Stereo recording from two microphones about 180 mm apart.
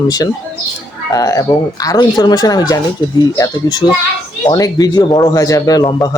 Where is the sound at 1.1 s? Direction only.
20° left (ahead or behind).